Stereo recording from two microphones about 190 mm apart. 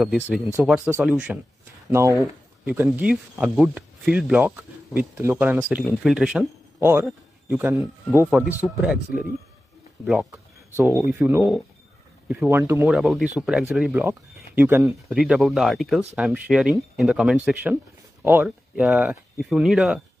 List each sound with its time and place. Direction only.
0.0 s speech: centre (ahead or behind)
10.8 s speech: 15° right (ahead or behind)